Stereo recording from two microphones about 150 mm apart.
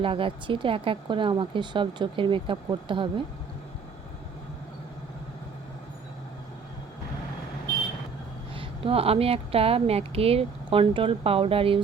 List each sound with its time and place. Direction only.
0.0 s a woman's voice: 35° right (ahead or behind)
8.5 s a woman's voice: 40° right (ahead or behind)